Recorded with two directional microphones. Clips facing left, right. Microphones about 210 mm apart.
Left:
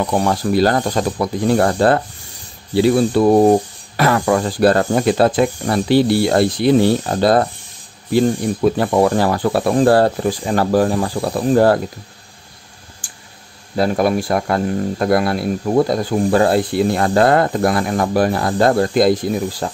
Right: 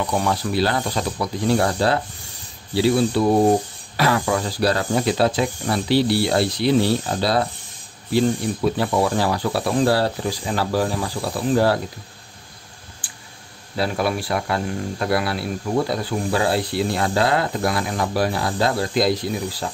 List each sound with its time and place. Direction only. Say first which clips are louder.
0.0 s speech: left 5 dB; 45° left (ahead or behind)
8.6 s speech: left 6 dB; 50° left (ahead or behind)
13.0 s clicking: left 1 dB; 45° left (ahead or behind)
13.7 s speech: left 6 dB; 45° left (ahead or behind)